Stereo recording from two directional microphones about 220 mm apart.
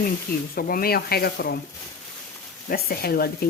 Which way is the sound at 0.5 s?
40° left (ahead or behind).